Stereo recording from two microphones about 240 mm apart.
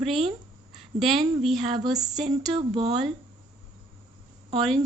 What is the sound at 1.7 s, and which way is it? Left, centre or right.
Speech, centre.